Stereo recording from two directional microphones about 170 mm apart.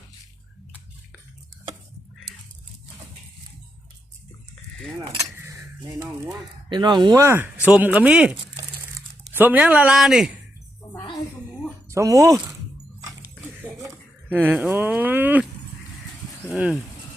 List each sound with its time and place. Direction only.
4.9 s keys jangling: 15° right (ahead or behind)
6.0 s speech: 15° right (ahead or behind)
6.7 s speech: 25° right (ahead or behind); by 8.4 s 5° right (ahead or behind)
8.7 s crumpling: 10° right (ahead or behind)
11.9 s speech: 20° right (ahead or behind)
13.2 s biting: 5° right (ahead or behind)
13.8 s speech: 10° right (ahead or behind)